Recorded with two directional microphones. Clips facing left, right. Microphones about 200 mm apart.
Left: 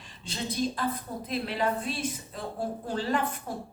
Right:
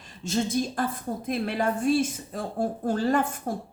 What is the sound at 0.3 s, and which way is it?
A woman's voice, 45° right (ahead or behind).